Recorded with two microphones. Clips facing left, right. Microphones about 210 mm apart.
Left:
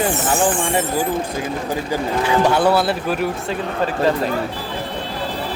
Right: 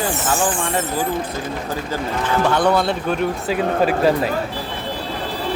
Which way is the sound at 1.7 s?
15° left (ahead or behind).